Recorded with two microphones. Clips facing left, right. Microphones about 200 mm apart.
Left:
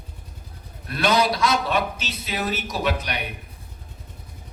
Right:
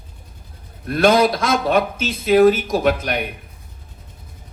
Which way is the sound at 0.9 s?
50° right (ahead or behind).